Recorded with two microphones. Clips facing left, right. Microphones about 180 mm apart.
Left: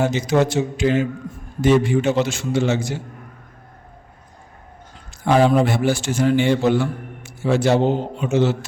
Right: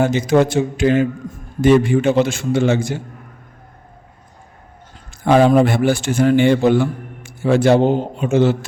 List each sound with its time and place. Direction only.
0.0 s a man's voice: 50° right (ahead or behind)
5.2 s a man's voice: 55° right (ahead or behind)